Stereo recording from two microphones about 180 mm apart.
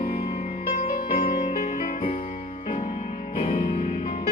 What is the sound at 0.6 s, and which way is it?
Music, 50° left (ahead or behind).